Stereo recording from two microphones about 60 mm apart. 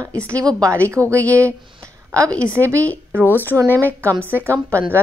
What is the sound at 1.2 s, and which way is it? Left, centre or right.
Speech, left.